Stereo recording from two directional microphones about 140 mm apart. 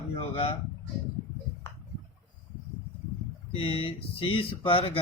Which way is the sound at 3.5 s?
40° left (ahead or behind).